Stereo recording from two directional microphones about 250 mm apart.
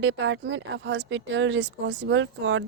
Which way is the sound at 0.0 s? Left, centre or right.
Right.